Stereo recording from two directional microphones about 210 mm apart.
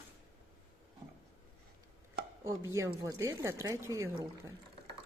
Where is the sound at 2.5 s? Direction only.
15° right (ahead or behind).